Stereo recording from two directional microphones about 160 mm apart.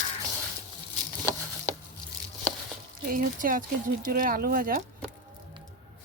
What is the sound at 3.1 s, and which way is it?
Speech, 60° right (ahead or behind).